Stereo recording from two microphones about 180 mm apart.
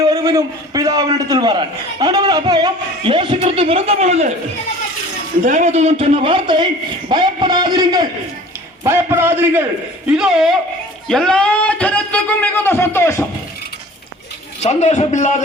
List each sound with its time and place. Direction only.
0.1 s a man's voice: 20° right (ahead or behind); by 4.3 s 40° right (ahead or behind)
5.4 s a man's voice: 45° right (ahead or behind); by 13.2 s 15° left (ahead or behind)
14.6 s a man's voice: 40° left (ahead or behind)